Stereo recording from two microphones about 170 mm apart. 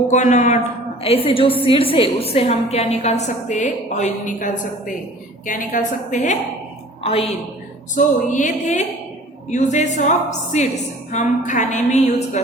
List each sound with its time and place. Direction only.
0.1 s a woman's voice: 45° left (ahead or behind)
1.0 s a woman's voice: 35° left (ahead or behind)
7.0 s a woman's voice: 35° left (ahead or behind)
7.9 s a woman's voice: 50° left (ahead or behind)
11.1 s a woman's voice: 45° left (ahead or behind)